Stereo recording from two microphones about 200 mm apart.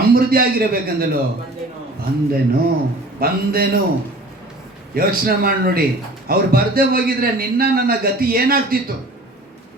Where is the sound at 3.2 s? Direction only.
50° right (ahead or behind).